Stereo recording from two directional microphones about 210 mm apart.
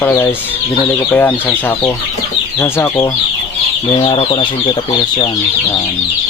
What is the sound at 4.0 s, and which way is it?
Speech, 25° left (ahead or behind).